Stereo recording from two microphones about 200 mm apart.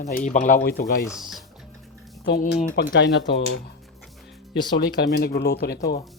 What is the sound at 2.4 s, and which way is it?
Speech, 55° left (ahead or behind).